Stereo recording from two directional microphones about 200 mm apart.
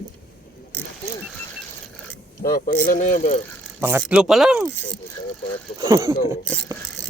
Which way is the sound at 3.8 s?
10° right (ahead or behind).